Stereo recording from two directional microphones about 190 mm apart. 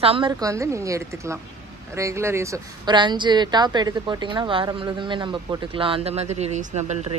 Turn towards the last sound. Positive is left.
turn(degrees=-35)  # may be behind; listen again after turning